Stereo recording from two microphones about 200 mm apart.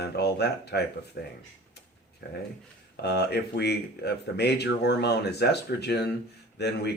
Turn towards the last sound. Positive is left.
turn(degrees=55)  # may be behind; listen again after turning